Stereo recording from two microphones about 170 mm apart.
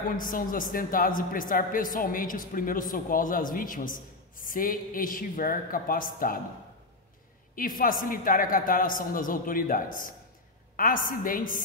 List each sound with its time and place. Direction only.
0.2 s a woman's voice: 55° left (ahead or behind)
7.5 s a woman's voice: 55° left (ahead or behind)